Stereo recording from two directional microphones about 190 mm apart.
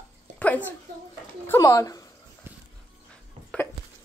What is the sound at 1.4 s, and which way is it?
Speech, 20° left (ahead or behind).